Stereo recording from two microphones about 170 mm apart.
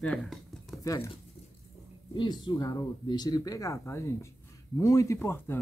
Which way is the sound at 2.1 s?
25° left (ahead or behind).